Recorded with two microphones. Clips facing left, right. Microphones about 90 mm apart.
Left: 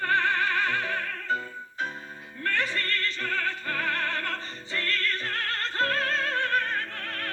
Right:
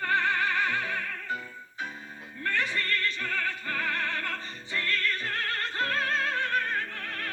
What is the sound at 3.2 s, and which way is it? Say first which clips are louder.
Opera: left 2 dB; 60° left (ahead or behind).